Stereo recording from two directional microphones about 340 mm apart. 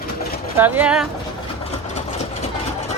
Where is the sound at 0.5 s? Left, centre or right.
Centre.